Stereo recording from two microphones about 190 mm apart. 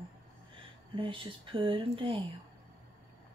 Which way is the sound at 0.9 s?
25° right (ahead or behind).